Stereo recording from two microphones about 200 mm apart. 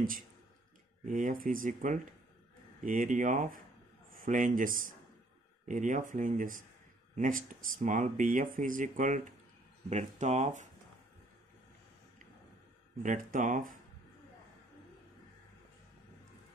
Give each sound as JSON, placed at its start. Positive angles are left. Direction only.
{"t": 1.0, "sound": "speech", "side_deg": -40}
{"t": 13.0, "sound": "speech", "side_deg": -40}